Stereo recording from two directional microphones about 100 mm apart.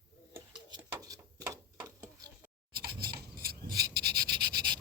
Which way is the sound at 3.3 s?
35° right (ahead or behind).